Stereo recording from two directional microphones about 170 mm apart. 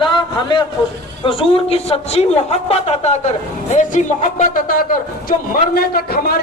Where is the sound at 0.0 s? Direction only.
25° left (ahead or behind); by 4.9 s 55° left (ahead or behind).